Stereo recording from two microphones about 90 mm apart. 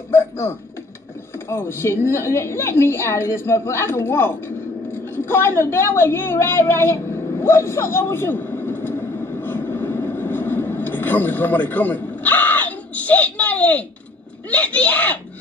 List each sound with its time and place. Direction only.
0.1 s a woman's voice: 25° left (ahead or behind)
4.9 s a sound: 25° left (ahead or behind)
14.5 s a child's voice: 15° left (ahead or behind)